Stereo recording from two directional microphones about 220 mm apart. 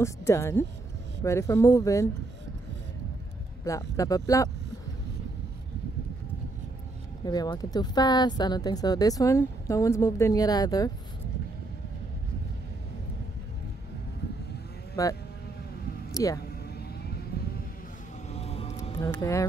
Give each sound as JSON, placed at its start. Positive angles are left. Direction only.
{"t": 0.0, "sound": "speech", "side_deg": 10}
{"t": 3.6, "sound": "speech", "side_deg": 15}
{"t": 7.2, "sound": "speech", "side_deg": 20}
{"t": 15.0, "sound": "speech", "side_deg": 15}
{"t": 17.3, "sound": "vehicle", "side_deg": 45}
{"t": 18.3, "sound": "vehicle", "side_deg": 30}
{"t": 18.9, "sound": "speech", "side_deg": 10}